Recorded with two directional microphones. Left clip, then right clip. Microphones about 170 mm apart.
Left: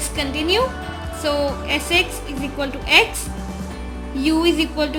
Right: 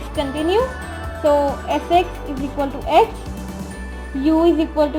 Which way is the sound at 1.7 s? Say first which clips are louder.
Right 2 dB; 30° right (ahead or behind).